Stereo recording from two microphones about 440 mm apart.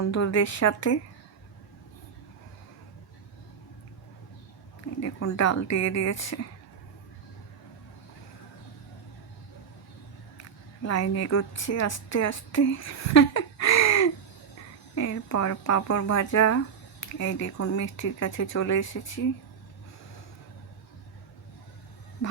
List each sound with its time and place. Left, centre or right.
0.1 s speech: left
4.9 s speech: left
10.8 s a woman's voice: left